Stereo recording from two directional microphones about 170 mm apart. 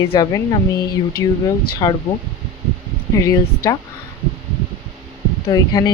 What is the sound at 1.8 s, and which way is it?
Speech, 25° left (ahead or behind).